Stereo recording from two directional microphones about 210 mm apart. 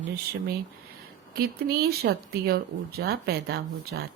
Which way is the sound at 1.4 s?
45° right (ahead or behind).